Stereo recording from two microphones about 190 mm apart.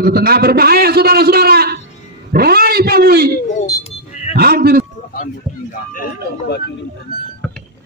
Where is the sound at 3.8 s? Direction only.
35° left (ahead or behind).